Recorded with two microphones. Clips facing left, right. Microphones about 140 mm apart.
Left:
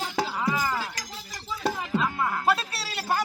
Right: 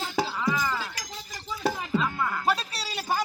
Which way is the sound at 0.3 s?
10° left (ahead or behind).